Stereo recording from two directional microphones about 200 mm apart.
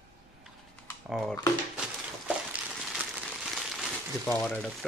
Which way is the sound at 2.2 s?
5° right (ahead or behind).